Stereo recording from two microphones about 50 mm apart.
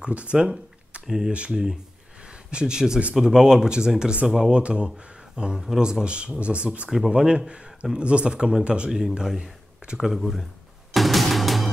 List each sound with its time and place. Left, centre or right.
0.0 s speech: right
1.0 s speech: centre
2.2 s a sound: centre
3.2 s speech: centre
9.9 s speech: centre
10.9 s music: centre